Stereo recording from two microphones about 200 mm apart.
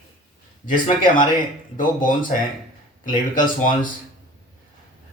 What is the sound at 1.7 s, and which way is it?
Speech, 40° left (ahead or behind).